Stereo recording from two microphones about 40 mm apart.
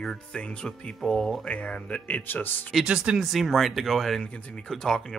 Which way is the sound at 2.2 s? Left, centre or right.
Left.